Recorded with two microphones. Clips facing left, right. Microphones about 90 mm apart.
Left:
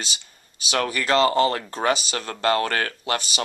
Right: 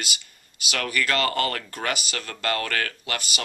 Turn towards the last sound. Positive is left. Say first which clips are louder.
# left 5 dB
turn(degrees=25)  # may be behind; listen again after turning